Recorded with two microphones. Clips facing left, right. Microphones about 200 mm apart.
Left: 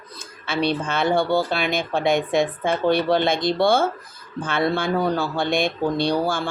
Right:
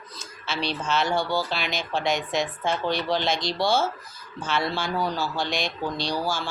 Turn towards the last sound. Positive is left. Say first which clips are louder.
# left 6 dB
turn(degrees=55)  # may be behind; listen again after turning